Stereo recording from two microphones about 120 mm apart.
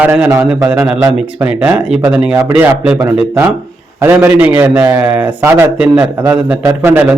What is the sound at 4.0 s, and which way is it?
A man's voice, 20° right (ahead or behind).